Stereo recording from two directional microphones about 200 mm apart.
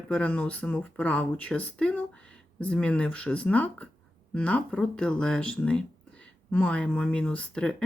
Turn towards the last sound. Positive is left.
turn(degrees=5)  # may be behind; listen again after turning